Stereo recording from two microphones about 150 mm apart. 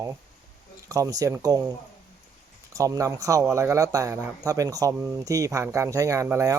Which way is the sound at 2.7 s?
20° right (ahead or behind).